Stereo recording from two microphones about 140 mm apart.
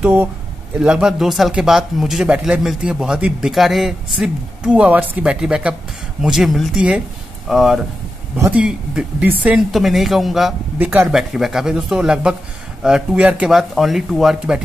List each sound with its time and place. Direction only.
0.0 s speech: 15° right (ahead or behind)
10.8 s speech: 10° right (ahead or behind)